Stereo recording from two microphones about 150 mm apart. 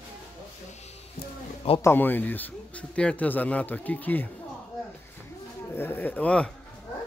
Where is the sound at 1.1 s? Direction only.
40° left (ahead or behind).